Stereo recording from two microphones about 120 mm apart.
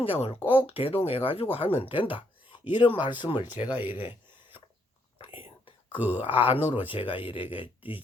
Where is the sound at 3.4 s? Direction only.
15° right (ahead or behind).